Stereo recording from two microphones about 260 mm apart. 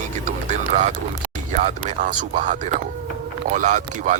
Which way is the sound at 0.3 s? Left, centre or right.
Right.